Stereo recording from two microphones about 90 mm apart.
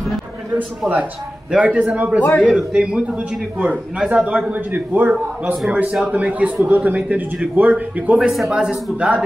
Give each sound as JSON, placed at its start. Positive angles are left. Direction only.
{"t": 1.5, "sound": "a man's voice", "side_deg": -15}
{"t": 8.3, "sound": "a man's voice", "side_deg": -5}